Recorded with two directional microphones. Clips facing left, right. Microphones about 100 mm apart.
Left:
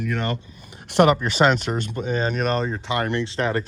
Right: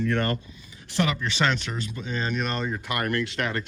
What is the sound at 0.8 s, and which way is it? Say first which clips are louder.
Speech: left 9 dB; 55° left (ahead or behind).